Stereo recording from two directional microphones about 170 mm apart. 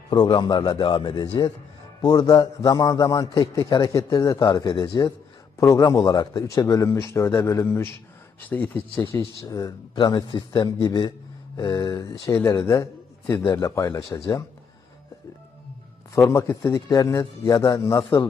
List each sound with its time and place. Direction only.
0.1 s a man's voice: 25° left (ahead or behind)
16.3 s a man's voice: 20° left (ahead or behind)